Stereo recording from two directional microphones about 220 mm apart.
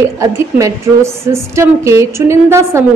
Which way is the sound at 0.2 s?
15° right (ahead or behind).